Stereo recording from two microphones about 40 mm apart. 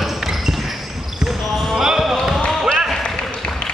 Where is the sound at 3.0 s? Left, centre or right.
Left.